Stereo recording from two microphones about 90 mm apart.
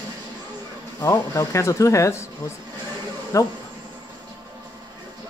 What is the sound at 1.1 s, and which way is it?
Speech, 40° left (ahead or behind).